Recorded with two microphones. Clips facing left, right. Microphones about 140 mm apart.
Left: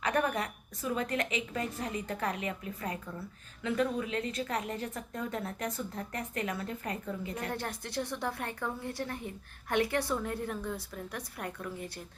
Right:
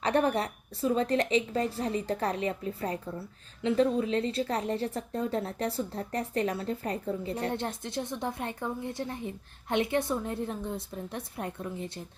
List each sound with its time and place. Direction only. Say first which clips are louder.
0.0 s a woman's voice: right 4 dB; 30° right (ahead or behind)